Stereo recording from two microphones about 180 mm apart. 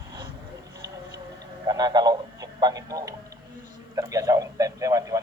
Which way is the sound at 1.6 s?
20° right (ahead or behind).